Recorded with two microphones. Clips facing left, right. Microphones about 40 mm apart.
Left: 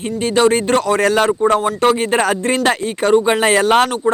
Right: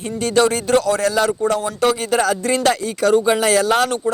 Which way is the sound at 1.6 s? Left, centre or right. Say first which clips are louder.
Left 3 dB; left.